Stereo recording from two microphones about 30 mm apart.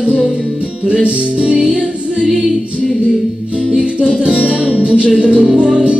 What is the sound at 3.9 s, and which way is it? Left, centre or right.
Music, right.